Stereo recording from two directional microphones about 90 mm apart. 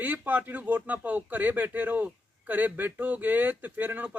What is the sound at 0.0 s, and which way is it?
Speech, 15° right (ahead or behind).